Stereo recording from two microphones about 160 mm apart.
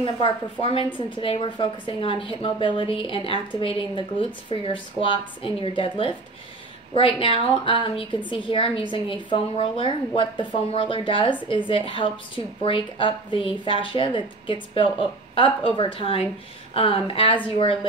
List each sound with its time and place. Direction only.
0.0 s a woman's voice: 30° left (ahead or behind)